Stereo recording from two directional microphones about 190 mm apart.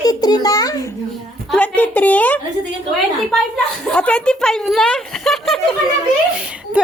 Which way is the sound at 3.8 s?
5° left (ahead or behind).